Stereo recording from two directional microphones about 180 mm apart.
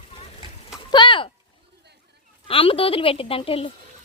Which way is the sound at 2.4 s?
30° left (ahead or behind).